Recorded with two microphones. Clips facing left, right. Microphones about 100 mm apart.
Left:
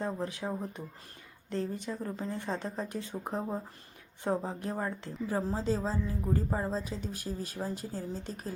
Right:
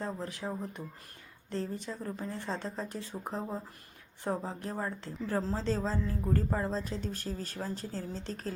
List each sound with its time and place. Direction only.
0.0 s speech: 20° left (ahead or behind)